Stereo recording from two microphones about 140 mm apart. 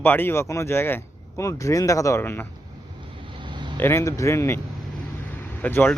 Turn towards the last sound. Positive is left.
turn(degrees=10)  # may be behind; listen again after turning